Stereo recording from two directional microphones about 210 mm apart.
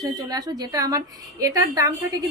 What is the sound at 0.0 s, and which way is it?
A woman's voice, 20° right (ahead or behind).